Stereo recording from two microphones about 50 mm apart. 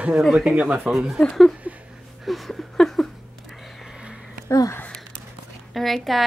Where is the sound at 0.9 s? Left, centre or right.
Centre.